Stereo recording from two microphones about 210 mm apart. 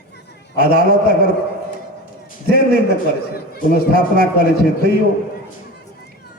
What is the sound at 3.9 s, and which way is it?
A man's voice, 45° right (ahead or behind).